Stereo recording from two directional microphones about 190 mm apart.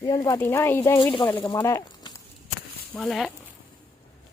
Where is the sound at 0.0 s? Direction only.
20° left (ahead or behind).